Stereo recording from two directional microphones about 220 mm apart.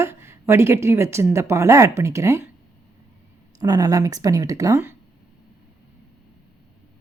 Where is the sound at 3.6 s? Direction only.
15° right (ahead or behind).